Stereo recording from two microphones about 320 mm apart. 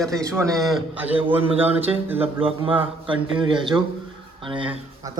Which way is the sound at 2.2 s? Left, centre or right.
Centre.